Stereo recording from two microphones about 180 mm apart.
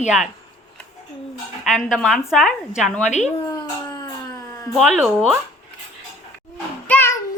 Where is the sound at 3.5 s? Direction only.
20° left (ahead or behind).